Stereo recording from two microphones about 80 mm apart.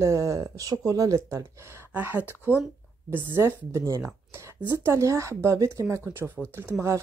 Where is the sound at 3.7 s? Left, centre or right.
Right.